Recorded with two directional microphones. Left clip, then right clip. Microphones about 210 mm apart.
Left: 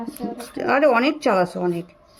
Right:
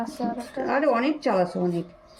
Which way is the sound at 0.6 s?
60° left (ahead or behind).